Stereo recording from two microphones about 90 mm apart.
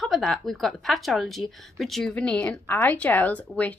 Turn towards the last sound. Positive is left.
turn(degrees=15)  # may be behind; listen again after turning